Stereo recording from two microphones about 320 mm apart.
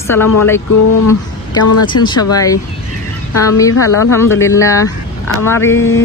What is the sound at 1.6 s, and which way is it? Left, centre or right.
Speech, left.